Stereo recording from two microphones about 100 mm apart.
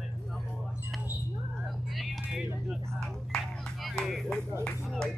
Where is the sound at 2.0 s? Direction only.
5° right (ahead or behind).